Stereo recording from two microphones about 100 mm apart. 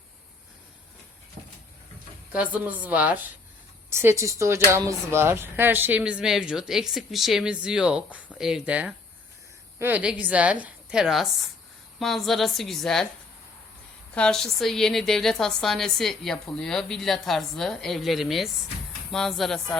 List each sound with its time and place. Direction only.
2.3 s speech: 15° right (ahead or behind)
3.9 s a woman's voice: 25° right (ahead or behind); by 13.1 s 5° left (ahead or behind)
14.2 s a woman's voice: 5° left (ahead or behind)